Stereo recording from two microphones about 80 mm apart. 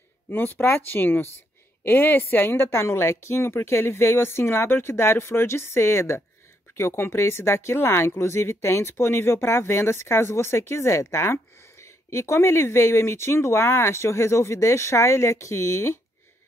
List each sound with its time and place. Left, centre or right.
0.3 s speech: left